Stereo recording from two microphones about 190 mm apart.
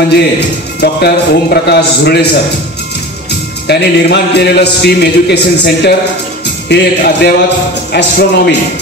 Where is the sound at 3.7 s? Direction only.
60° left (ahead or behind).